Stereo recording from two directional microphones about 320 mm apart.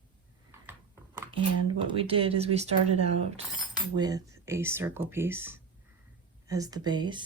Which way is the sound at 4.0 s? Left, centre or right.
Centre.